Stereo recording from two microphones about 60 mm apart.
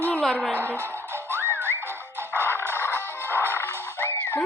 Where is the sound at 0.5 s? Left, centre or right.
Right.